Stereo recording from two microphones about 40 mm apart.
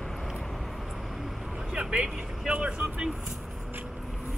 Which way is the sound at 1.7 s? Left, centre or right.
Right.